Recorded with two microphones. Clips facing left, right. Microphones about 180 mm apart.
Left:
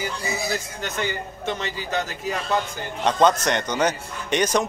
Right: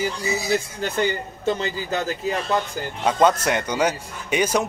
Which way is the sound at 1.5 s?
35° right (ahead or behind).